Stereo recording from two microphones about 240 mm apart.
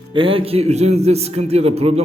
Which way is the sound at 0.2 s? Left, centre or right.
Right.